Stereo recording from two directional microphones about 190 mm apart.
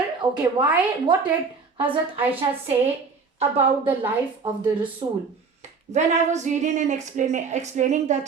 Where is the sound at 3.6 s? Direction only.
10° right (ahead or behind).